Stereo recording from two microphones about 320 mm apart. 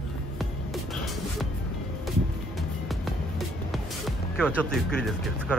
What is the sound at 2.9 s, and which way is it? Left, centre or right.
Music, centre.